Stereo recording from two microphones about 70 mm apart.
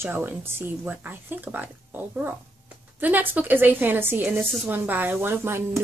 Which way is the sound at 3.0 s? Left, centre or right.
Right.